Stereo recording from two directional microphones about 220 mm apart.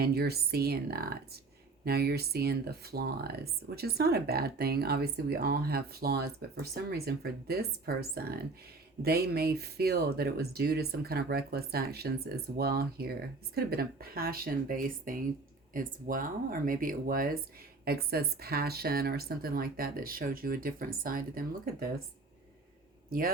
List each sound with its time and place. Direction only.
0.0 s speech: 45° right (ahead or behind)
23.0 s a man's voice: 40° right (ahead or behind)